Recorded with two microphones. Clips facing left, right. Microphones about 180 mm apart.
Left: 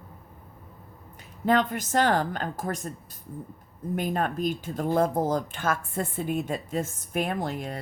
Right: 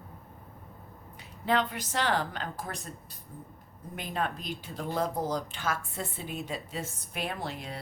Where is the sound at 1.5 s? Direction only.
45° left (ahead or behind).